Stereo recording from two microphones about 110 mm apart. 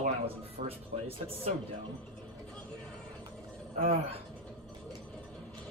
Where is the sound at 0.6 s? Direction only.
90° right.